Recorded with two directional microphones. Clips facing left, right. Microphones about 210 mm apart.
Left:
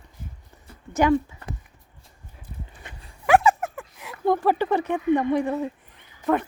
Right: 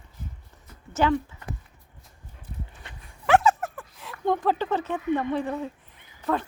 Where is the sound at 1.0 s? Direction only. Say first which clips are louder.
Left 3 dB; 15° left (ahead or behind).